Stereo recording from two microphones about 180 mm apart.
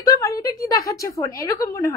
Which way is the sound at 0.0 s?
20° left (ahead or behind).